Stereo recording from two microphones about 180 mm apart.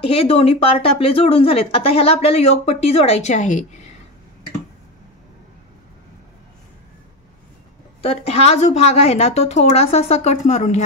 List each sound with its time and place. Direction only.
0.0 s speech: 30° left (ahead or behind)
8.0 s speech: 35° left (ahead or behind)